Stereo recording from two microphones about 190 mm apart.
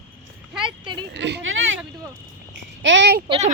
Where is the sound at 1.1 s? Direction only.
70° right (ahead or behind).